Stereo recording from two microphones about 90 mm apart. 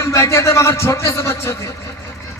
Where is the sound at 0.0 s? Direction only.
35° left (ahead or behind).